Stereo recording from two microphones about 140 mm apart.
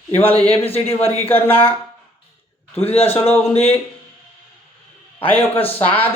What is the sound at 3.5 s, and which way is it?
Speech, 45° left (ahead or behind).